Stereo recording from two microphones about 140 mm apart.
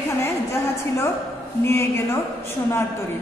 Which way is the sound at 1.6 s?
20° left (ahead or behind).